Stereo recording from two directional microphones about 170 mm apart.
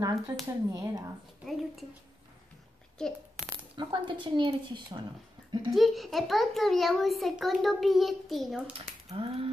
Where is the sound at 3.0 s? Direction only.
5° left (ahead or behind).